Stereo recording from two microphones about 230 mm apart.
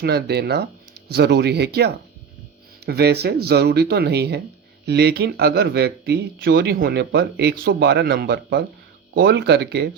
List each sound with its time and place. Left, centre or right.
0.0 s speech: right